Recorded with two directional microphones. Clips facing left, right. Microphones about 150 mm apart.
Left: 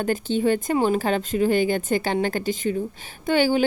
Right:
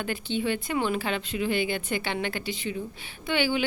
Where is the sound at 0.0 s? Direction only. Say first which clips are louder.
Left 7 dB; 40° left (ahead or behind).